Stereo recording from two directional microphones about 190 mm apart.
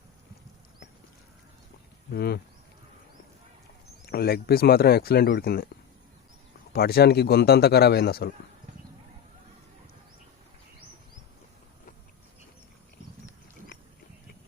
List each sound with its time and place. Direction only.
2.1 s speech: 55° left (ahead or behind)
4.0 s speech: 55° left (ahead or behind)
6.7 s speech: 55° left (ahead or behind)